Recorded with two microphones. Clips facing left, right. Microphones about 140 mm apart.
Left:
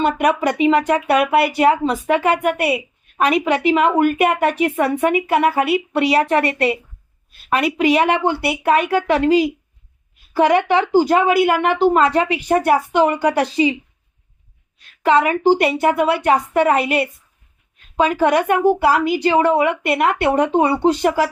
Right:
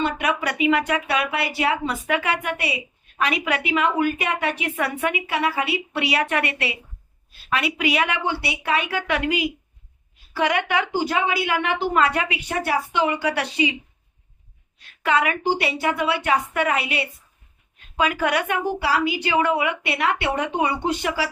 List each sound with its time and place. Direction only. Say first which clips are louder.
0.2 s a woman's voice: left 7 dB; 40° left (ahead or behind)
15.0 s speech: left 7 dB; 35° left (ahead or behind)
17.9 s a woman's voice: left 6 dB; 35° left (ahead or behind)